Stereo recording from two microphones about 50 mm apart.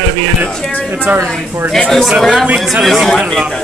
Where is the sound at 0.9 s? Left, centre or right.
Right.